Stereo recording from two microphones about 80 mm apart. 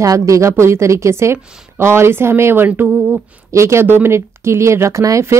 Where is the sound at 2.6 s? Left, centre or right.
Centre.